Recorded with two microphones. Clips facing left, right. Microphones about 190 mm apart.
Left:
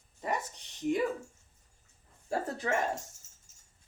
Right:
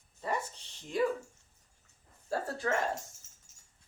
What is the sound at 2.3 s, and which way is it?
Speech, 15° left (ahead or behind).